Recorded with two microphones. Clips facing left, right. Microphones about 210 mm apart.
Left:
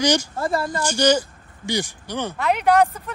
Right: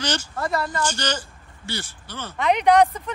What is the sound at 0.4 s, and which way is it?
Speech, 30° left (ahead or behind).